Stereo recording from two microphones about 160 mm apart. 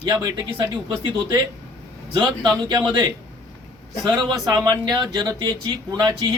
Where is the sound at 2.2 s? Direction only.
25° right (ahead or behind).